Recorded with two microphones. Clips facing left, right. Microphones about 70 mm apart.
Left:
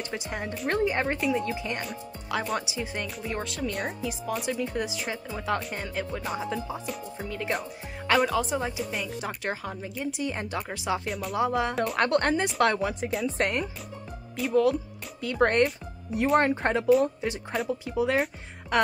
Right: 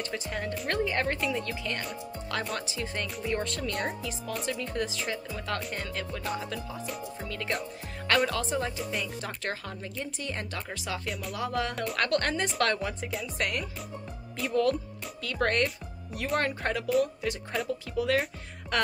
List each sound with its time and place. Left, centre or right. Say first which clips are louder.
0.1 s speech: even; left
1.4 s speech: left 3 dB; centre
11.1 s speech: left 3 dB; centre
11.3 s speech: left 6 dB; left
14.3 s speech: left 3 dB; centre
15.2 s speech: left 5 dB; left
18.7 s music: left 4 dB; centre